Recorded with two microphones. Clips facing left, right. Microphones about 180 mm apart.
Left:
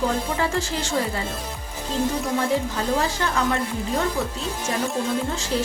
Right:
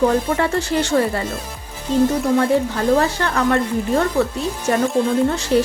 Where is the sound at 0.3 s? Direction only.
65° right (ahead or behind).